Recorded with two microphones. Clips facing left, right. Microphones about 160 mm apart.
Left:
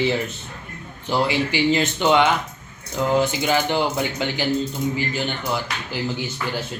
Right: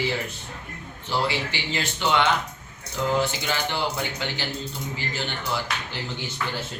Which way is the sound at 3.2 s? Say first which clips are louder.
Left 7 dB; 15° left (ahead or behind).